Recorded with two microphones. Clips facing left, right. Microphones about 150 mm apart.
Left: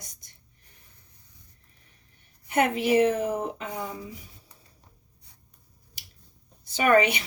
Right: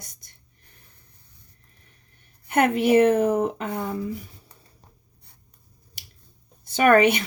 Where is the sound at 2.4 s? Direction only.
60° right (ahead or behind).